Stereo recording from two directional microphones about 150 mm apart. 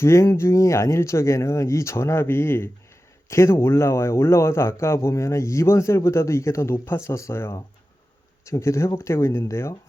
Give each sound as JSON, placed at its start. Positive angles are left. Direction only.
{"t": 0.0, "sound": "speech", "side_deg": 20}